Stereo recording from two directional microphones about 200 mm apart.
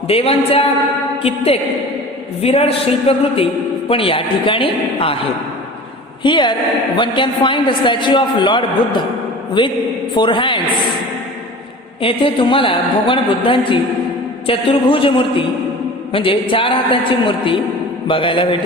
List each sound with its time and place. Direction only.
0.1 s a man's voice: 30° left (ahead or behind)
2.4 s a man's voice: 30° left (ahead or behind)
6.2 s a man's voice: 25° left (ahead or behind)
12.0 s a man's voice: 25° left (ahead or behind)